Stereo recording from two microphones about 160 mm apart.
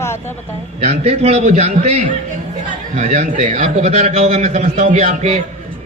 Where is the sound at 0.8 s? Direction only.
45° right (ahead or behind).